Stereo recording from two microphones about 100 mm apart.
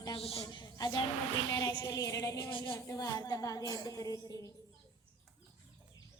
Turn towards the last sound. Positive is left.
turn(degrees=35)  # may be behind; listen again after turning